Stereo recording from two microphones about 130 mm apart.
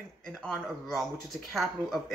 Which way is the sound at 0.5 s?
5° left (ahead or behind).